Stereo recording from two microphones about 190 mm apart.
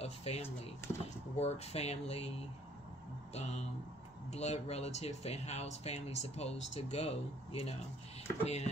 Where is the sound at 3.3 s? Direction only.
35° left (ahead or behind).